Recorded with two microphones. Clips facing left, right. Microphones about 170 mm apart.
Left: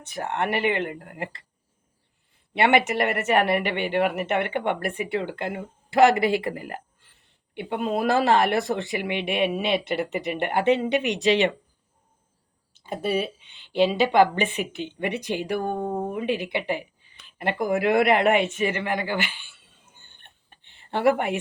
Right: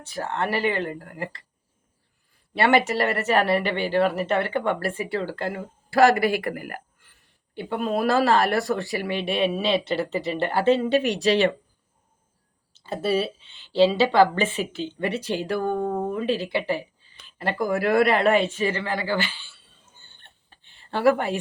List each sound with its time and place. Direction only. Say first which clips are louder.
0.0 s speech: even; 20° left (ahead or behind)
12.7 s speech: right 2 dB; 15° left (ahead or behind)